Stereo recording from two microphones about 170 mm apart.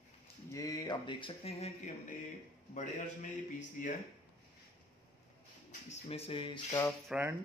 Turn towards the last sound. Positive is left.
turn(degrees=-15)  # may be behind; listen again after turning